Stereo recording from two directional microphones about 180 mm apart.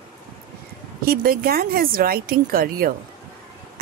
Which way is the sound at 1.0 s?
55° right (ahead or behind).